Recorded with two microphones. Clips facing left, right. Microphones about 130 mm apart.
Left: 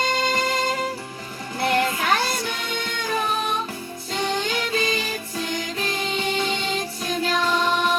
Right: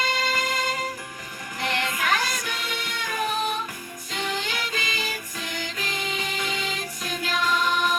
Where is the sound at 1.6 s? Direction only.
35° left (ahead or behind).